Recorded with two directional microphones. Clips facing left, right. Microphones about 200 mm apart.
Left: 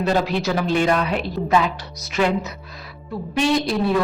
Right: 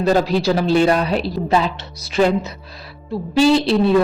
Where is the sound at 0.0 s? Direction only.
40° right (ahead or behind).